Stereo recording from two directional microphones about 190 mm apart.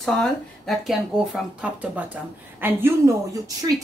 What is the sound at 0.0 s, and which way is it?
Speech, centre (ahead or behind).